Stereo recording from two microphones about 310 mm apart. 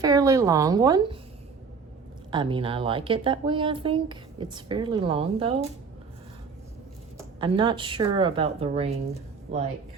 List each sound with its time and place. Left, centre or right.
0.0 s speech: centre
2.3 s speech: centre
7.2 s speech: centre